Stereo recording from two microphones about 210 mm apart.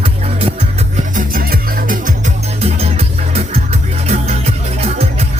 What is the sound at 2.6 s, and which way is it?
Music, 30° right (ahead or behind).